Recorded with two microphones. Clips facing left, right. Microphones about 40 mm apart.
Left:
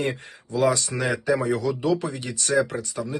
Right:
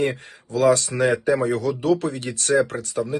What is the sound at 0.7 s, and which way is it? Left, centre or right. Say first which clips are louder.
Speech: right 6 dB; right.